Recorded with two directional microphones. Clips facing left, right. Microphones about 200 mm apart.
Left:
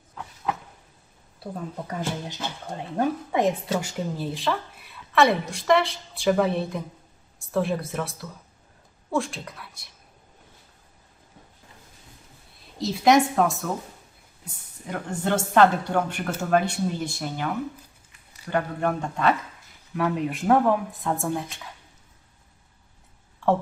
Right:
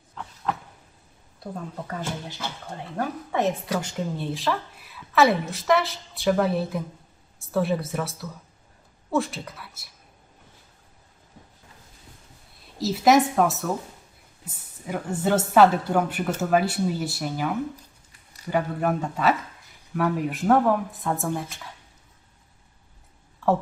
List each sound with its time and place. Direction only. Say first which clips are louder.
1.5 s speech: left 2 dB; 10° left (ahead or behind)
3.8 s a woman's voice: even; 5° left (ahead or behind)
12.8 s a woman's voice: even; 5° right (ahead or behind)
18.5 s a woman's voice: right 1 dB; 5° right (ahead or behind)
23.4 s speech: even; centre (ahead or behind)